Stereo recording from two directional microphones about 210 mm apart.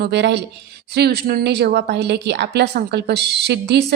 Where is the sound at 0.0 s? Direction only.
55° right (ahead or behind).